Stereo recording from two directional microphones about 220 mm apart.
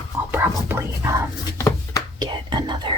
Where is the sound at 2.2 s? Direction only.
20° right (ahead or behind).